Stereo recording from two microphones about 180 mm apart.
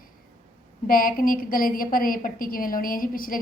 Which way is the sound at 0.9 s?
50° left (ahead or behind).